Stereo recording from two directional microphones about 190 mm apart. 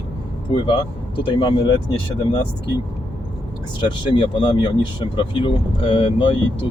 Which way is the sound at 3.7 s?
25° left (ahead or behind).